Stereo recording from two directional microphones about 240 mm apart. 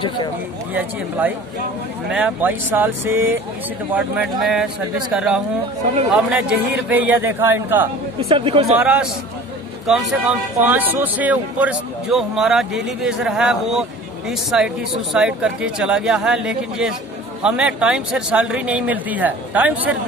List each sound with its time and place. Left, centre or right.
0.7 s a man's voice: centre
8.2 s speech: right
8.7 s speech: centre